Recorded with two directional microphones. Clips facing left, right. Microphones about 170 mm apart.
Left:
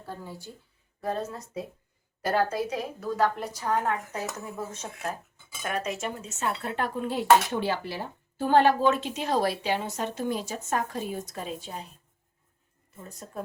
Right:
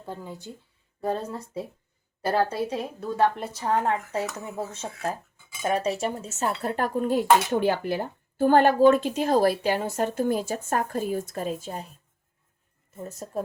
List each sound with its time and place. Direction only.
0.0 s a woman's voice: 20° right (ahead or behind)
1.0 s a woman's voice: 30° right (ahead or behind); by 11.9 s 45° right (ahead or behind)